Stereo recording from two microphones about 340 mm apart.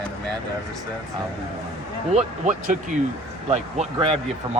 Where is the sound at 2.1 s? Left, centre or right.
Right.